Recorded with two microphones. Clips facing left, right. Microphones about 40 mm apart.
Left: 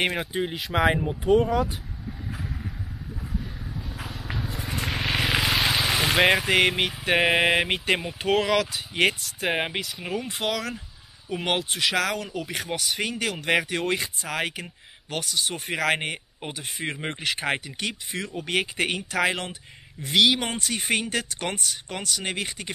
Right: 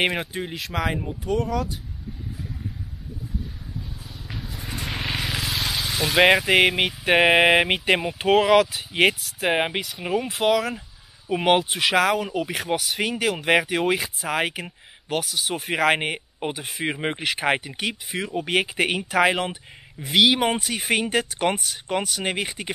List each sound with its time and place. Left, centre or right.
0.0 s speech: centre
0.3 s speech: centre
0.8 s speech: centre
4.4 s a sound: centre
5.4 s vehicle: centre
6.1 s speech: centre